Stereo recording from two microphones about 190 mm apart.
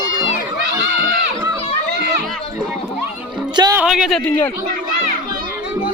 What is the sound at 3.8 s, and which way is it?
Speech, 5° right (ahead or behind).